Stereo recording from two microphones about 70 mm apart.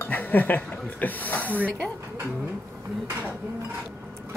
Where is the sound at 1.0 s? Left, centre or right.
Left.